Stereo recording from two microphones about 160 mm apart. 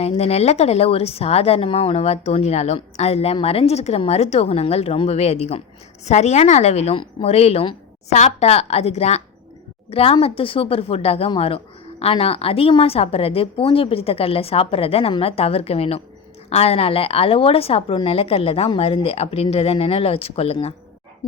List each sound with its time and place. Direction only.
0.0 s a woman's voice: 40° left (ahead or behind)